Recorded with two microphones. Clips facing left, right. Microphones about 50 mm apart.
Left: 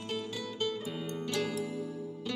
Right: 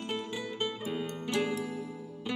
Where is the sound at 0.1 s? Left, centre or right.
Right.